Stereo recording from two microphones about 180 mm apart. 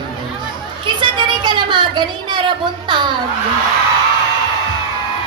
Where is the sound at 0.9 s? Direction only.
25° right (ahead or behind).